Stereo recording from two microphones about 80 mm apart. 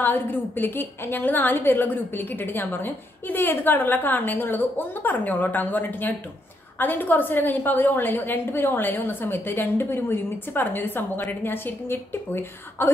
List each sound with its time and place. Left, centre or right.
0.0 s a woman's voice: left